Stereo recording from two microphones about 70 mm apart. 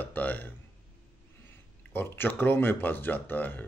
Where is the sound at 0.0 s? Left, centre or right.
Left.